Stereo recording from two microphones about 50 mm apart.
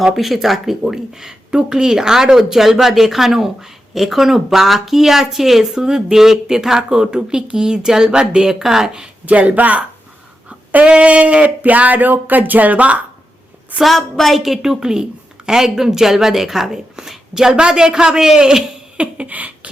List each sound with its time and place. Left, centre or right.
0.0 s speech: centre
9.2 s speech: right
13.8 s a woman's voice: centre; by 19.7 s right